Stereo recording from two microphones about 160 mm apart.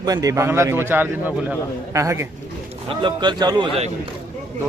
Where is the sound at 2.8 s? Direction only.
30° right (ahead or behind).